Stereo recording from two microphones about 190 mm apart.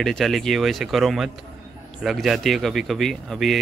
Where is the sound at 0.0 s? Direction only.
Centre (ahead or behind).